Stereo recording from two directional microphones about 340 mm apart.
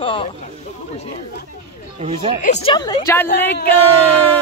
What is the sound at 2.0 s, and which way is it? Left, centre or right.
Speech, centre.